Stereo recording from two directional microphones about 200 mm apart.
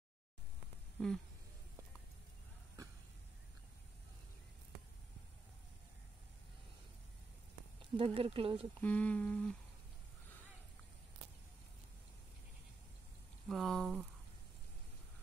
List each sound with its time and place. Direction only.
0.9 s a sound: 5° left (ahead or behind)
8.0 s speech: 30° right (ahead or behind)
8.8 s humming: 5° left (ahead or behind)
13.5 s humming: centre (ahead or behind)